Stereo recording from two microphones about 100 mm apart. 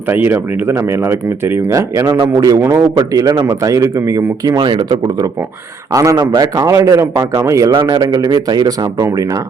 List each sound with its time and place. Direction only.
0.1 s speech: 20° right (ahead or behind)
1.7 s a man's voice: 35° right (ahead or behind)
4.5 s a man's voice: 50° right (ahead or behind)
5.9 s a man's voice: 35° right (ahead or behind)
7.9 s a man's voice: 45° right (ahead or behind)